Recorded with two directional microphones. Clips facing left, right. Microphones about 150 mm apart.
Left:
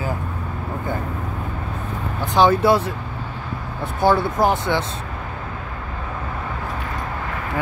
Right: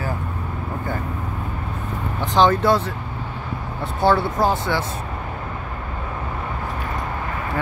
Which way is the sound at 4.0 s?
15° left (ahead or behind).